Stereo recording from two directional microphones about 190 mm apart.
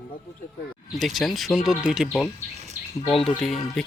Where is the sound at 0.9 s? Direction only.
Centre (ahead or behind).